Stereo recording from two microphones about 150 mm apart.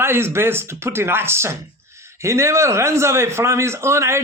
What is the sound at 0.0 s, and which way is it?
A man's voice, 15° right (ahead or behind).